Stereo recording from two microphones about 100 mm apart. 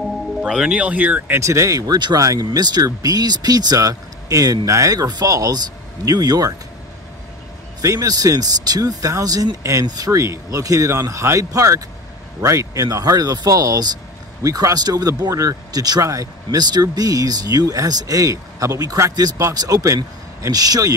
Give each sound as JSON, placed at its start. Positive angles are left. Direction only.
{"t": 0.0, "sound": "speech", "side_deg": -5}
{"t": 1.4, "sound": "speech", "side_deg": -30}
{"t": 7.8, "sound": "speech", "side_deg": -35}